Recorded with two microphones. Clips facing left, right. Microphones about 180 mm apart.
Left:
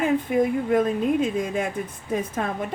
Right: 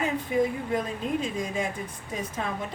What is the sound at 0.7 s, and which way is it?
Speech, 55° left (ahead or behind).